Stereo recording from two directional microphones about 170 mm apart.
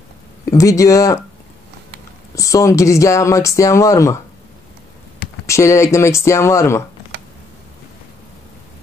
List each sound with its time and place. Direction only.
0.5 s speech: 20° left (ahead or behind)
2.3 s speech: 20° left (ahead or behind)
5.5 s speech: 15° left (ahead or behind)